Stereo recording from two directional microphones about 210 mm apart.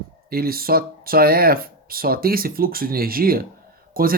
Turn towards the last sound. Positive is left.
turn(degrees=-45)  # may be behind; listen again after turning